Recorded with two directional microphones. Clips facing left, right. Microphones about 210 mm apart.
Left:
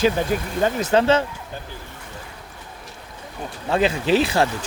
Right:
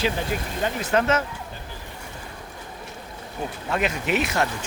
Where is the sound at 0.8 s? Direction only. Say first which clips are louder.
Left 4 dB; 30° left (ahead or behind).